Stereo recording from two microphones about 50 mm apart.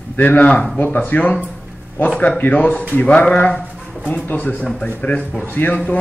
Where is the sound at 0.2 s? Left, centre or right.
Left.